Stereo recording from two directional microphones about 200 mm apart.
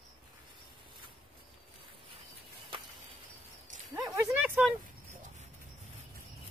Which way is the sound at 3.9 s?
15° right (ahead or behind).